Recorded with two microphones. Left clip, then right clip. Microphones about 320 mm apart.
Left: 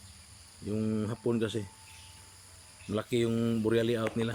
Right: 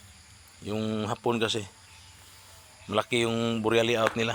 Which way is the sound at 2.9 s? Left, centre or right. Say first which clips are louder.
Right 5 dB; centre.